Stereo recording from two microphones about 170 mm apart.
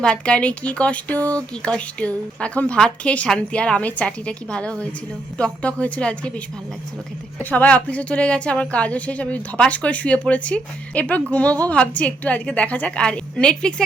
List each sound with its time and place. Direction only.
0.0 s speech: 5° left (ahead or behind)